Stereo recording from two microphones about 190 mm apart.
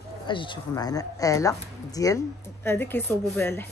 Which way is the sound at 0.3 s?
25° left (ahead or behind).